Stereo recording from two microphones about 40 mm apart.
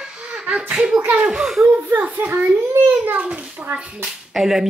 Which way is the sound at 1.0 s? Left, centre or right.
Right.